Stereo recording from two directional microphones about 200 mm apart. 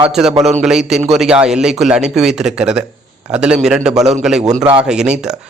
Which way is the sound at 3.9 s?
35° right (ahead or behind).